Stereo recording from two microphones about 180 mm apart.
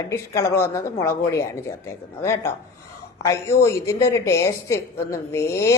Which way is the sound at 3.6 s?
15° left (ahead or behind).